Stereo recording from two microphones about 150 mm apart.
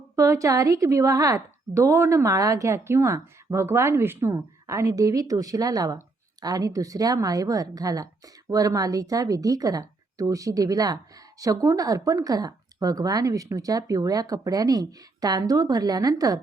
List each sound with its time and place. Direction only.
0.2 s a woman's voice: 20° right (ahead or behind)